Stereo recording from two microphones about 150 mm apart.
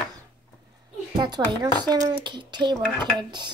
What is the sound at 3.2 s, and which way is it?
Dishes, 30° right (ahead or behind).